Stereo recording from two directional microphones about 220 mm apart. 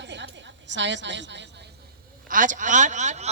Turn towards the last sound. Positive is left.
turn(degrees=-30)  # may be behind; listen again after turning